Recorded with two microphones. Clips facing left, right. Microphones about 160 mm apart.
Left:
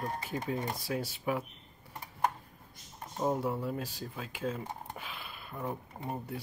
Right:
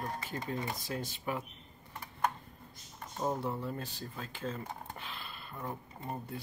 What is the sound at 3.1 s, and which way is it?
Speech, 10° left (ahead or behind).